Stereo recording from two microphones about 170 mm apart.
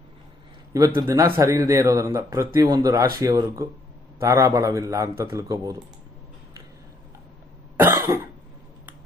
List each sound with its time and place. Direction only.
0.7 s a man's voice: 15° right (ahead or behind)
7.8 s cough: 15° right (ahead or behind)